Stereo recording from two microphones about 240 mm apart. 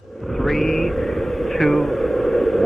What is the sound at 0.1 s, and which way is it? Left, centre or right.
Vehicle, centre.